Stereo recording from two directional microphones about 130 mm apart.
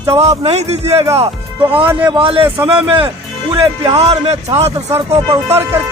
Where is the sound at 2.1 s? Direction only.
45° right (ahead or behind).